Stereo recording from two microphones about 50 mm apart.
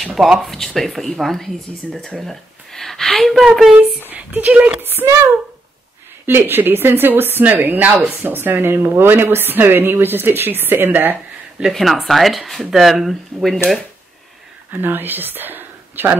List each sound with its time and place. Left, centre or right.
0.0 s speech: centre
1.9 s speech: centre
2.1 s speech: centre
4.1 s speech: right
4.7 s a woman's voice: right
6.2 s a woman's voice: right
11.8 s speech: centre
13.3 s speech: centre
14.7 s speech: right